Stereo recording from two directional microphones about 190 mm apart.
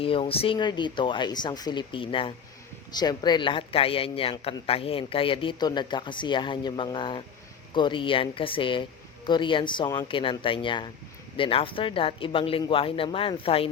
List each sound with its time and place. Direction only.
0.0 s a man's voice: 30° left (ahead or behind)